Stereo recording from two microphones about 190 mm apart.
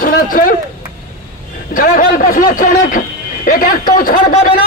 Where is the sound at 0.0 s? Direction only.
45° left (ahead or behind).